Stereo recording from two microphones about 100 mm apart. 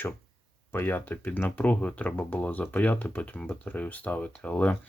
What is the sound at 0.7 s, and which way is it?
Speech, 20° left (ahead or behind).